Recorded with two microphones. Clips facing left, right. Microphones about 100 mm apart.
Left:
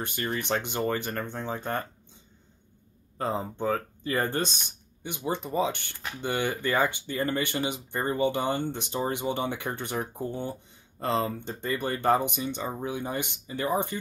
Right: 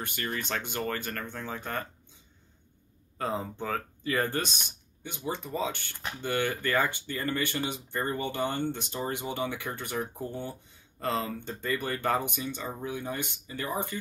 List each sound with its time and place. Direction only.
0.0 s speech: 25° left (ahead or behind)
3.2 s speech: 25° left (ahead or behind)